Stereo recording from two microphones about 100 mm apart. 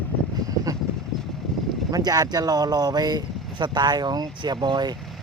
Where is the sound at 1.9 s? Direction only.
40° right (ahead or behind).